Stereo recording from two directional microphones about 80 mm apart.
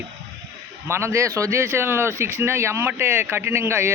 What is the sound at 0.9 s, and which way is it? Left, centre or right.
Speech, right.